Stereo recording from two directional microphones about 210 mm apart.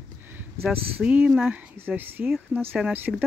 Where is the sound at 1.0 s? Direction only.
5° right (ahead or behind).